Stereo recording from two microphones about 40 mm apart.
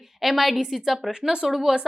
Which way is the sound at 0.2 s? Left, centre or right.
Centre.